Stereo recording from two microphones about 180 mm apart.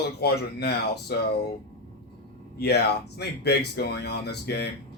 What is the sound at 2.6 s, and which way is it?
Speech, 65° left (ahead or behind).